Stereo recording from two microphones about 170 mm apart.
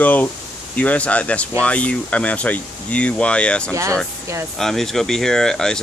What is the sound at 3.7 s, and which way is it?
Speech, 20° right (ahead or behind).